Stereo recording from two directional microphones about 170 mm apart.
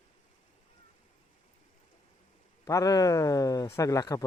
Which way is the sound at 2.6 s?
20° left (ahead or behind).